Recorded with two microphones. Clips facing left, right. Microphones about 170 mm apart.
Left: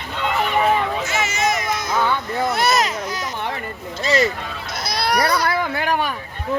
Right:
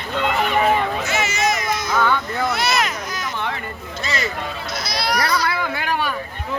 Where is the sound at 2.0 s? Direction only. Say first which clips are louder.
Right 1 dB; 30° left (ahead or behind).